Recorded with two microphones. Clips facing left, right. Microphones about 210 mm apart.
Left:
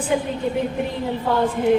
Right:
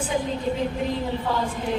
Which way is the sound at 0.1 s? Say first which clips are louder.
Left 5 dB; 60° left (ahead or behind).